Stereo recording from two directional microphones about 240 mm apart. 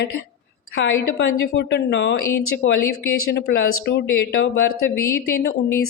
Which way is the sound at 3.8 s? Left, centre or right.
Left.